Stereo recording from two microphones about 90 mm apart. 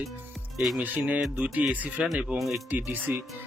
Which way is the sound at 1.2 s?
Centre (ahead or behind).